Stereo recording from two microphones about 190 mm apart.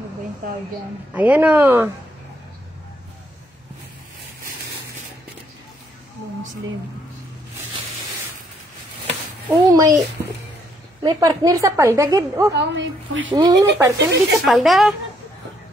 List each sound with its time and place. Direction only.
1.1 s a woman's voice: 10° right (ahead or behind)
9.5 s a woman's voice: 15° right (ahead or behind)
11.0 s a woman's voice: 20° right (ahead or behind)
12.5 s a woman's voice: 75° right (ahead or behind)
13.3 s a woman's voice: 20° right (ahead or behind)
14.3 s speech: centre (ahead or behind)